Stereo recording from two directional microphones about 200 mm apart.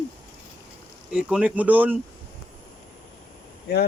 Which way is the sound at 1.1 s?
5° right (ahead or behind).